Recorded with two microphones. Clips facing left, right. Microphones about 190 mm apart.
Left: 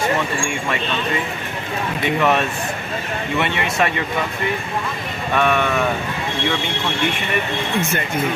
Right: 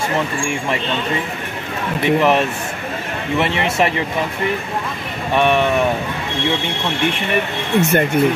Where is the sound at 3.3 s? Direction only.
30° right (ahead or behind).